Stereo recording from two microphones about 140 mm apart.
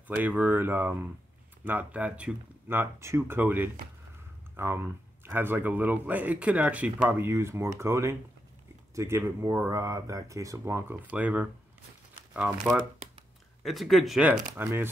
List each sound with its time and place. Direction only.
0.1 s speech: 10° right (ahead or behind)
13.7 s speech: centre (ahead or behind)
14.3 s speech: 20° right (ahead or behind)